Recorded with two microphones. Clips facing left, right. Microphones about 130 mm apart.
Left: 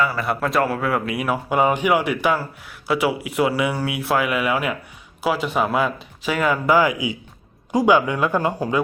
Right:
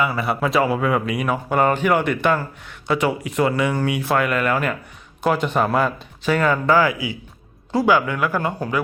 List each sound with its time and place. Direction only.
0.1 s speech: centre (ahead or behind); by 8.8 s 15° left (ahead or behind)